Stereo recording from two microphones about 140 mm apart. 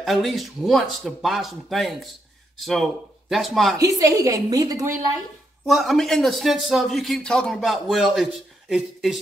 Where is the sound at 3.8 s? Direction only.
25° right (ahead or behind).